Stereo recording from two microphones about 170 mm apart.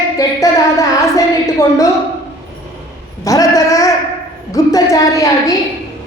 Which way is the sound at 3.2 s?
20° left (ahead or behind).